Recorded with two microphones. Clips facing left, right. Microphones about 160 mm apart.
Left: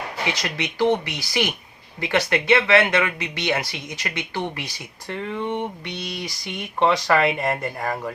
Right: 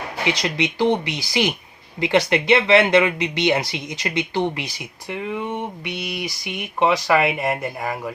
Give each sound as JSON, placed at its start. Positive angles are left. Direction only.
{"t": 0.4, "sound": "speech", "side_deg": -20}